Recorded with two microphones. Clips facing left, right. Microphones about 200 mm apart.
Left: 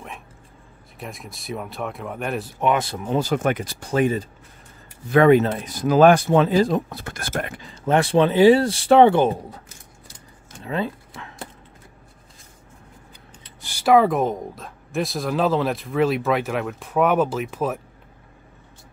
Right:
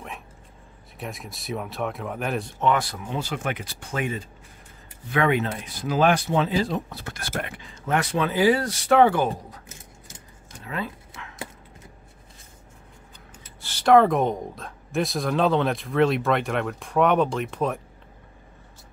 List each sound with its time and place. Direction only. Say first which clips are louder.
0.9 s speech: even; centre (ahead or behind)
2.6 s speech: left 2 dB; 20° left (ahead or behind)
3.0 s speech: left 8 dB; 40° left (ahead or behind); by 9.6 s 25° left (ahead or behind)
10.6 s a sound: left 6 dB; 30° left (ahead or behind)
13.6 s speech: even; 10° left (ahead or behind)